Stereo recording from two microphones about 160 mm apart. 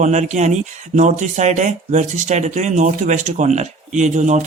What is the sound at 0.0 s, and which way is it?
A man's voice, 50° right (ahead or behind).